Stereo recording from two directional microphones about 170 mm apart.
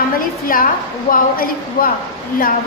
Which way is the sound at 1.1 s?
55° left (ahead or behind).